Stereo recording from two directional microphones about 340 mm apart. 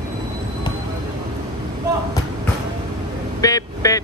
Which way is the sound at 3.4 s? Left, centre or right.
Centre.